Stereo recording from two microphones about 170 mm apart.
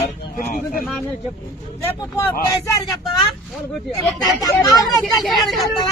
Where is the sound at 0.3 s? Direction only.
55° left (ahead or behind).